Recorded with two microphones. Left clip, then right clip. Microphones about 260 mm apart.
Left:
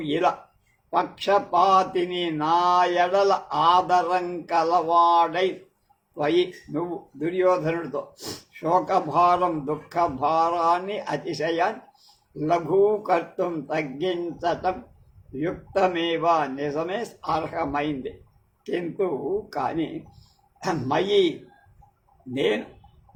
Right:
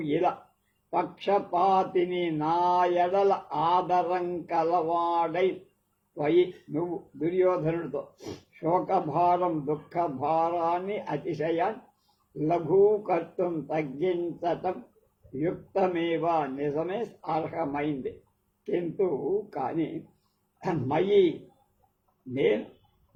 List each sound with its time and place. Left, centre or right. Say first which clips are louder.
0.0 s speech: left 4 dB; left